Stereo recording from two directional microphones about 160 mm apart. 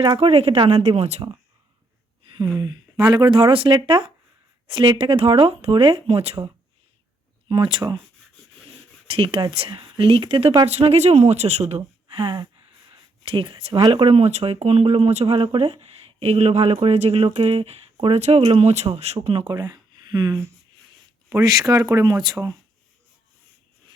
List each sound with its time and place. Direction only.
0.2 s speech: 40° right (ahead or behind)
2.6 s speech: 25° right (ahead or behind)
9.0 s speech: 35° right (ahead or behind)
10.7 s speech: 40° right (ahead or behind); by 22.5 s 25° right (ahead or behind)